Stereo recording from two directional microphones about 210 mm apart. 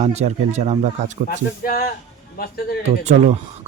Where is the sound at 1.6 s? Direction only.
45° left (ahead or behind).